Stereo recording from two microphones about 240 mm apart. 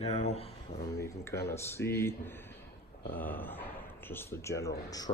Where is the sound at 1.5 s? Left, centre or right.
Centre.